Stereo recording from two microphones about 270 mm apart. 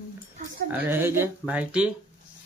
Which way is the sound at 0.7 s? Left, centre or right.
Centre.